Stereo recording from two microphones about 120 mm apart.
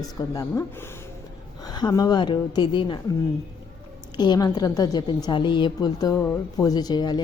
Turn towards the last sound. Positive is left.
turn(degrees=35)  # may be behind; listen again after turning